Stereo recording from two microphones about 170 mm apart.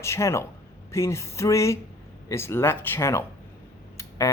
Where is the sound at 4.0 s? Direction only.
20° left (ahead or behind).